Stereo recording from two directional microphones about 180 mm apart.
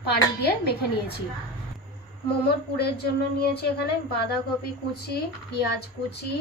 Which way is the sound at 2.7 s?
60° left (ahead or behind).